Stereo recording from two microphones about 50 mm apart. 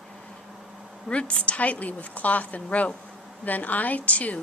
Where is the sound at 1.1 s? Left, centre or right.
Left.